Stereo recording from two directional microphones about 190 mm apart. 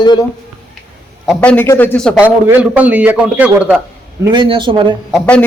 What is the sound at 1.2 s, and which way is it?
Speech, centre (ahead or behind).